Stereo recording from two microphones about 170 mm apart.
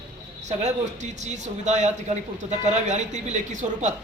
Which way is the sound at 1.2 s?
45° right (ahead or behind).